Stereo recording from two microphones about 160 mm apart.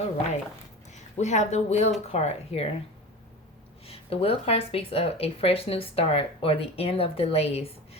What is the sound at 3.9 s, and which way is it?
Speech, 35° left (ahead or behind).